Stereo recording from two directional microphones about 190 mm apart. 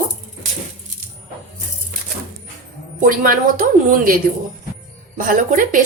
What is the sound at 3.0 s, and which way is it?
A woman's voice, 45° right (ahead or behind).